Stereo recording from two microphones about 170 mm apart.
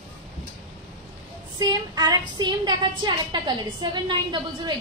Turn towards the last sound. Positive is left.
turn(degrees=-25)  # may be behind; listen again after turning